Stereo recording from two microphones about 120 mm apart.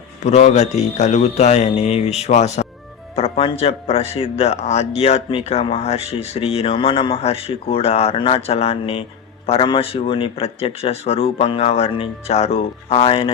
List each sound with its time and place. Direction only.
0.3 s a man's voice: 70° left (ahead or behind)
3.2 s music: 55° left (ahead or behind)
3.6 s speech: 55° left (ahead or behind)